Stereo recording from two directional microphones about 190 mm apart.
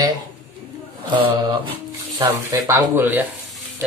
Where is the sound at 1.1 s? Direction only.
25° right (ahead or behind).